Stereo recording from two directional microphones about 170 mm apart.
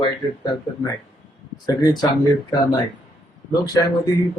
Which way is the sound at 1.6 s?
20° left (ahead or behind).